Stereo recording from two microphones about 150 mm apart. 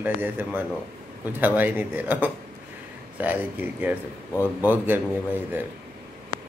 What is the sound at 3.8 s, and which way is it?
Speech, 10° right (ahead or behind).